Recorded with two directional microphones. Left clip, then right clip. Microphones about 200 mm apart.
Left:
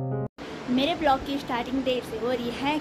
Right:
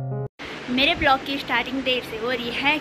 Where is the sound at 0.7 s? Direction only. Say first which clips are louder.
Right 4 dB; 5° left (ahead or behind).